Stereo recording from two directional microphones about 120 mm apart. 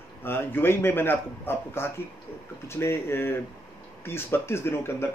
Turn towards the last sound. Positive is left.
turn(degrees=20)  # may be behind; listen again after turning